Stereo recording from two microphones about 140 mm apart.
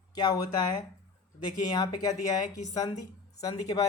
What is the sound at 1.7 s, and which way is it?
Speech, 25° left (ahead or behind).